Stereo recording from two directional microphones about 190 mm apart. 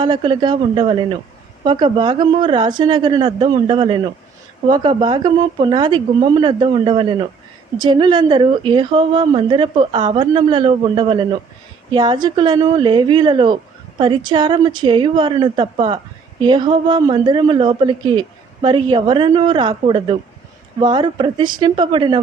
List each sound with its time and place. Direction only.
0.0 s a woman's voice: 25° right (ahead or behind)